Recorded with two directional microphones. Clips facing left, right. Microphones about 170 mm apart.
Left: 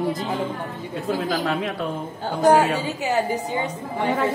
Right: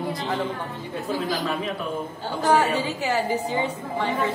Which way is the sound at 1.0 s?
70° left (ahead or behind).